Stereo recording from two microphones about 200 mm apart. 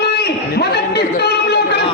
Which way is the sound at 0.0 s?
55° left (ahead or behind).